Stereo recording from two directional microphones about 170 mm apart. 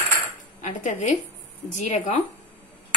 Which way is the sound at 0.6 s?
45° left (ahead or behind).